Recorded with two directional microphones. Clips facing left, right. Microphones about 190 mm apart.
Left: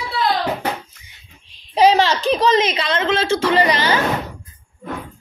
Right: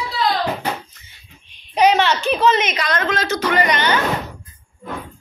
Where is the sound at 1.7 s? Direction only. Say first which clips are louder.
Left 1 dB; 35° left (ahead or behind).